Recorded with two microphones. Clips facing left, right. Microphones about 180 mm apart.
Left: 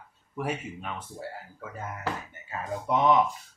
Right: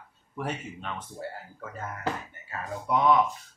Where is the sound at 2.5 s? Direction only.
20° left (ahead or behind).